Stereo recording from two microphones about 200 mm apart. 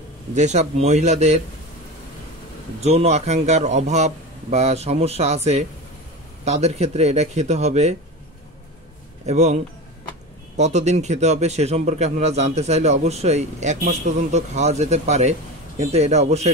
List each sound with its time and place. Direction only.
0.3 s a man's voice: 35° right (ahead or behind)
2.8 s a man's voice: 35° right (ahead or behind)
9.2 s a man's voice: 35° right (ahead or behind)
10.6 s a man's voice: 35° right (ahead or behind)